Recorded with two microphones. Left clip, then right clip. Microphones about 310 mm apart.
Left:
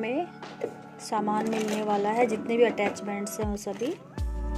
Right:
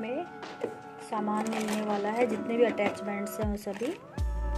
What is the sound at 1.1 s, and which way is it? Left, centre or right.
Speech, centre.